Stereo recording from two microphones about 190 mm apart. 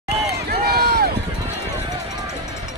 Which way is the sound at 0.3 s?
55° right (ahead or behind).